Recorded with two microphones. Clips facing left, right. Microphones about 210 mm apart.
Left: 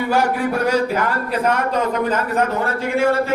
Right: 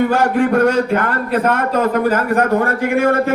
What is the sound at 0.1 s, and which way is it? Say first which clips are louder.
Speech: right 4 dB; 10° left (ahead or behind).